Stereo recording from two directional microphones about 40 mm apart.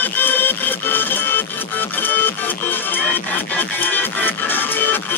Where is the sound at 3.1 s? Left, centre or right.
Left.